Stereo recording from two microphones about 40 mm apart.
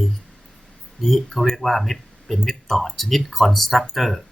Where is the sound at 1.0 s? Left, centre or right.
Centre.